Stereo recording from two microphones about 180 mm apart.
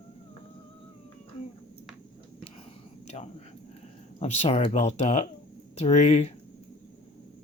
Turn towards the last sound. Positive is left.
turn(degrees=40)  # may be behind; listen again after turning